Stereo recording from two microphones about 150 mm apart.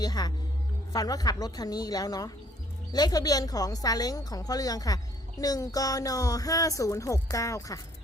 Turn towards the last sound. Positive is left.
turn(degrees=20)  # may be behind; listen again after turning